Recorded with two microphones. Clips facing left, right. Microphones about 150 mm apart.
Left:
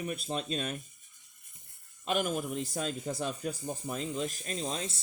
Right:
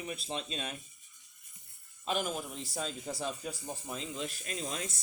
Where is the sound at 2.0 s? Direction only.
50° left (ahead or behind).